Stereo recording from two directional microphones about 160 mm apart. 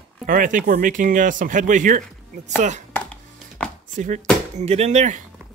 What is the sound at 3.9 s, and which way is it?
Speech, 55° right (ahead or behind).